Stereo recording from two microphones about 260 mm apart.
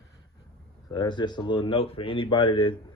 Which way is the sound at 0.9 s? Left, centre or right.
Centre.